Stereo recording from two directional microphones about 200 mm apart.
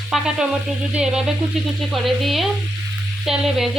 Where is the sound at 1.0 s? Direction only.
5° right (ahead or behind).